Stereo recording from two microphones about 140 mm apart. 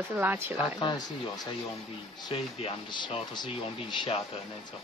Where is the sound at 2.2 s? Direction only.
40° left (ahead or behind).